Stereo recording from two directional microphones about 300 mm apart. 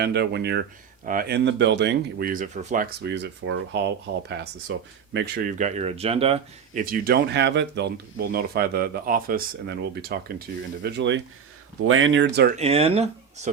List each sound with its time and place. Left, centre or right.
0.0 s speech: right
12.5 s speech: centre